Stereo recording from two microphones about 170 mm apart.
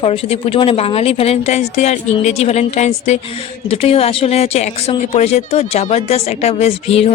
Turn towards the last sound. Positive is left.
turn(degrees=35)  # may be behind; listen again after turning